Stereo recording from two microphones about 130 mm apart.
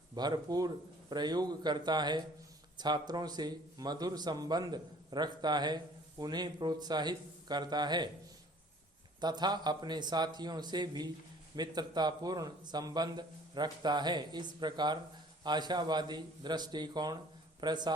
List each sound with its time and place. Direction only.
0.2 s speech: 30° right (ahead or behind)
9.2 s speech: 35° right (ahead or behind)